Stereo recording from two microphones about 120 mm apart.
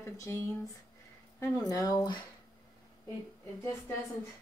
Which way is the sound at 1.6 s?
30° left (ahead or behind).